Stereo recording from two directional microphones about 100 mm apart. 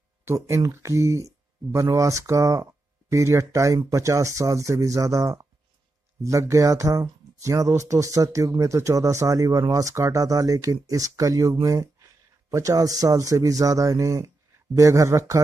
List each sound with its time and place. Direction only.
0.2 s speech: 25° right (ahead or behind)